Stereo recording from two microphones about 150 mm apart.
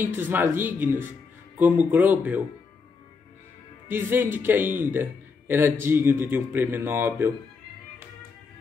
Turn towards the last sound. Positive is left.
turn(degrees=-15)  # may be behind; listen again after turning